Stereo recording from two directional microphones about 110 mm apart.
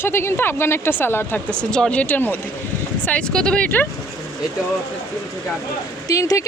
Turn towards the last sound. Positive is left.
turn(degrees=30)  # may be behind; listen again after turning